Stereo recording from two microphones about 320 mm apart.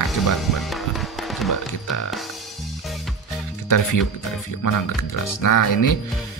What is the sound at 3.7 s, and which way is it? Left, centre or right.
Speech, left.